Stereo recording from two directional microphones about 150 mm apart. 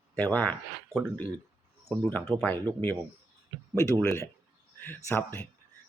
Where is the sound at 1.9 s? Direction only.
10° left (ahead or behind).